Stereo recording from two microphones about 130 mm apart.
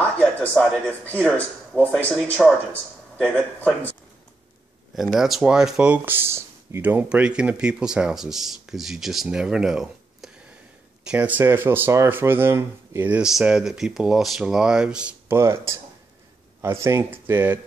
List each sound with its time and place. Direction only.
0.0 s speech: 10° left (ahead or behind)
4.9 s speech: centre (ahead or behind); by 13.1 s 20° right (ahead or behind)
13.1 s speech: 5° right (ahead or behind)
15.2 s speech: 20° right (ahead or behind)